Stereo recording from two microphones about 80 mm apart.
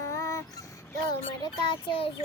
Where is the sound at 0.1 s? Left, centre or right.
Left.